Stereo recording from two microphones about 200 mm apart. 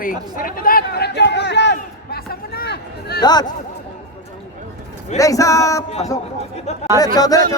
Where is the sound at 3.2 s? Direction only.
20° left (ahead or behind).